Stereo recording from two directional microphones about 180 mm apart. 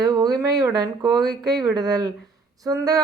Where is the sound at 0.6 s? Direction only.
20° right (ahead or behind).